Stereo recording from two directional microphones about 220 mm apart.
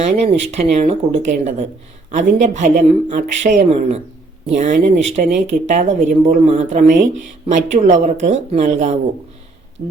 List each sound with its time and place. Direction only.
0.0 s speech: 30° right (ahead or behind)